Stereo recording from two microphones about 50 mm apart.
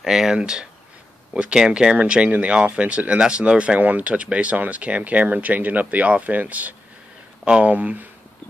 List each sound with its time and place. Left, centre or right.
0.0 s speech: centre; by 8.1 s right